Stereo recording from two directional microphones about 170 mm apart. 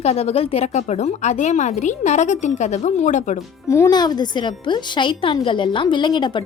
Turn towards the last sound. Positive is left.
turn(degrees=25)  # may be behind; listen again after turning